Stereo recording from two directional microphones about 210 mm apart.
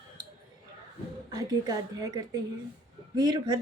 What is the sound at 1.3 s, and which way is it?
Speech, 20° right (ahead or behind).